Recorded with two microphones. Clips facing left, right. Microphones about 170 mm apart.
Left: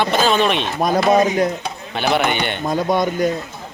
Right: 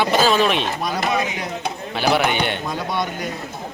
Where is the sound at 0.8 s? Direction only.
45° left (ahead or behind).